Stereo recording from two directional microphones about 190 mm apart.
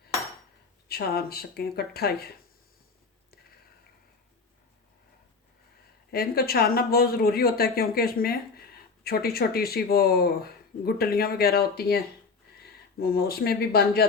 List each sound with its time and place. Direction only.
0.9 s speech: 55° left (ahead or behind)
6.1 s speech: 55° left (ahead or behind)